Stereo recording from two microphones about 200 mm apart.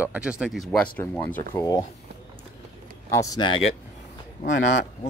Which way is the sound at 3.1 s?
15° left (ahead or behind).